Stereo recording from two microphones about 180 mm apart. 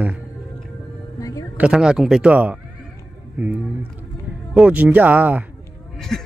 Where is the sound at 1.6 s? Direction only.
5° right (ahead or behind).